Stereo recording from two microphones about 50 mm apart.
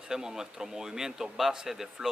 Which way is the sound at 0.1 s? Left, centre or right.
Centre.